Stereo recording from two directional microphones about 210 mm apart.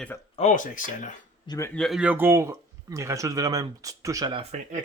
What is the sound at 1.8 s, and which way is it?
Speech, centre (ahead or behind).